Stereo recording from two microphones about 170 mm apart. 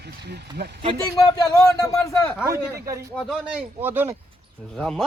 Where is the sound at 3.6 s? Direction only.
10° right (ahead or behind).